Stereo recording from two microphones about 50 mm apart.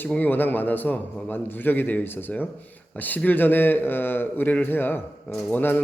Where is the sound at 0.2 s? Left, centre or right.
Left.